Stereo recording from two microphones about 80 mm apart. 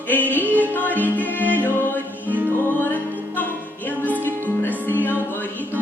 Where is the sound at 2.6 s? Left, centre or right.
Left.